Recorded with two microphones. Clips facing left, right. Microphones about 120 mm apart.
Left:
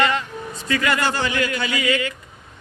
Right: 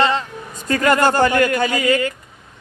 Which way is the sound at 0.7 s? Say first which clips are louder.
Right 6 dB; 45° right (ahead or behind).